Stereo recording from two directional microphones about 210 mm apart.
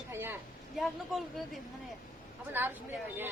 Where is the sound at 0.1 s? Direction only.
10° right (ahead or behind).